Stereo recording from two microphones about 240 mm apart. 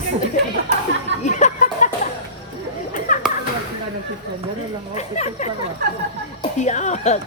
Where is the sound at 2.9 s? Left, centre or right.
Left.